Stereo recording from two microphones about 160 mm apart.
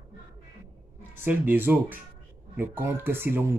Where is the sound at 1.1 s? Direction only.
10° right (ahead or behind).